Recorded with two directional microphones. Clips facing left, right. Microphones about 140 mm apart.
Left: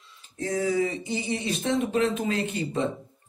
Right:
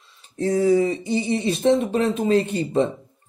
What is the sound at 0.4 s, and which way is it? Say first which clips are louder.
Speech: right 7 dB; 35° right (ahead or behind).